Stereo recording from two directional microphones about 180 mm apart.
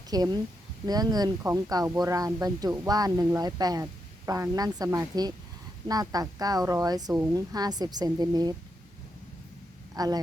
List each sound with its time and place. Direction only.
0.1 s speech: 20° right (ahead or behind)
9.9 s speech: 20° right (ahead or behind)